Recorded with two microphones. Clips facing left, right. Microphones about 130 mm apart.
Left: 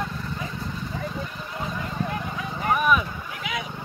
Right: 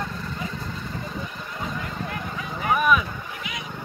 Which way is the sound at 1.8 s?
20° left (ahead or behind).